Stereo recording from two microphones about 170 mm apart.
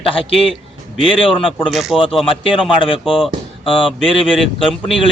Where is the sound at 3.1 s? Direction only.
Centre (ahead or behind).